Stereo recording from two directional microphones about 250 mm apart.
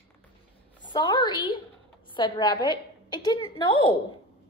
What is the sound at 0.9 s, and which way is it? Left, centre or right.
A woman's voice, centre.